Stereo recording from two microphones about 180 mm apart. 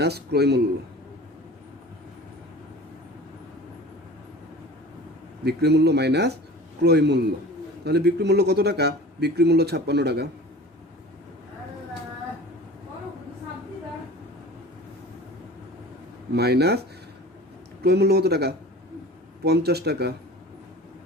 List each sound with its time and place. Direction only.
0.0 s speech: 65° right (ahead or behind)
5.5 s a man's voice: 65° right (ahead or behind)
16.3 s speech: 65° right (ahead or behind)
17.8 s speech: 65° right (ahead or behind)